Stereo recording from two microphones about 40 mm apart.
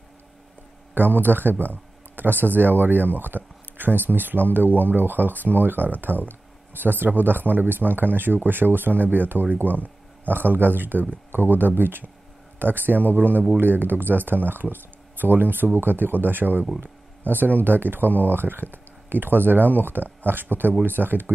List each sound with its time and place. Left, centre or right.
0.9 s speech: right